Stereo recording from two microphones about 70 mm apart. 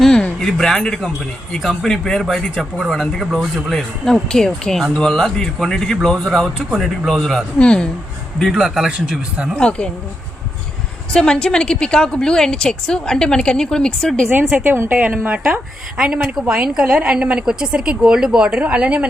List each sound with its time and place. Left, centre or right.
0.0 s a sound: centre
1.5 s a man's voice: centre
8.5 s a woman's voice: centre
9.6 s speech: centre
11.1 s speech: centre
14.3 s a woman's voice: right
16.0 s a woman's voice: centre